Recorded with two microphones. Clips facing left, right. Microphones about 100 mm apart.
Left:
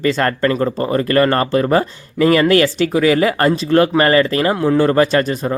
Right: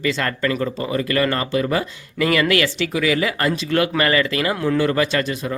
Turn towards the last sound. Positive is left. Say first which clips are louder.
# left 6 dB
turn(degrees=45)  # may be behind; listen again after turning